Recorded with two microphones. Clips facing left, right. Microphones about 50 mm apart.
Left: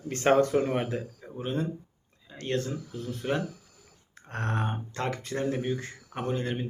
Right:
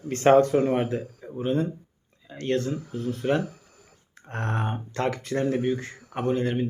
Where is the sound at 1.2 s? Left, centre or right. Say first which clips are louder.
Right 5 dB; centre.